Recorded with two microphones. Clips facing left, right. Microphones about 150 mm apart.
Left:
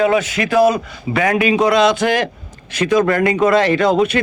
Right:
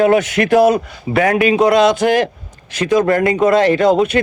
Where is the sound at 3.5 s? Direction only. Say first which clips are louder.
Right 2 dB; 45° right (ahead or behind).